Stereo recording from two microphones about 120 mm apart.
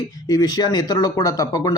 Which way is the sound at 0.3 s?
30° left (ahead or behind).